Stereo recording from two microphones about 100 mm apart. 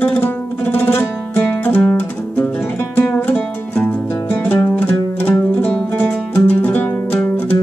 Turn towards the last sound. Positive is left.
turn(degrees=15)  # may be behind; listen again after turning